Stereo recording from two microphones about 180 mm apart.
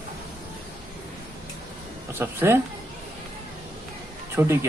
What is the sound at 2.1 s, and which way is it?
Speech, 10° right (ahead or behind).